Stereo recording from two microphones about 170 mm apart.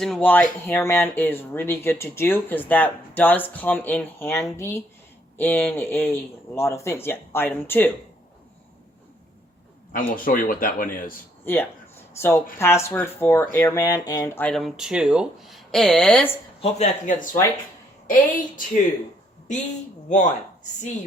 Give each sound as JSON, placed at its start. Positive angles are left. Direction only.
{"t": 0.0, "sound": "speech", "side_deg": 5}
{"t": 9.9, "sound": "a man's voice", "side_deg": 55}
{"t": 11.4, "sound": "speech", "side_deg": 10}
{"t": 14.4, "sound": "speech", "side_deg": 0}
{"t": 16.6, "sound": "speech", "side_deg": 40}
{"t": 20.1, "sound": "speech", "side_deg": 45}